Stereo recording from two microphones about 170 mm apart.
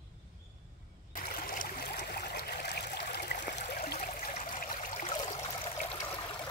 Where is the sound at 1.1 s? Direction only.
55° left (ahead or behind).